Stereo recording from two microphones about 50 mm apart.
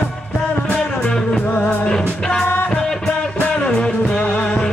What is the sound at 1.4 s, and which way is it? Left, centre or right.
Music, left.